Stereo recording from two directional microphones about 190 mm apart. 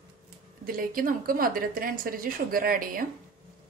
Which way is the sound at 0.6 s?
50° right (ahead or behind).